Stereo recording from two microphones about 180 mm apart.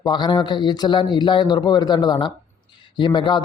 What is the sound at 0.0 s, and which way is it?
A man's voice, 25° left (ahead or behind).